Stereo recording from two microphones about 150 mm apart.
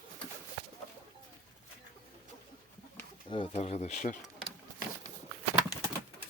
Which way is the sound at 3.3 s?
40° left (ahead or behind).